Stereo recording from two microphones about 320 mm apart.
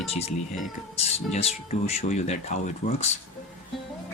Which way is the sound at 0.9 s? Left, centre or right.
Centre.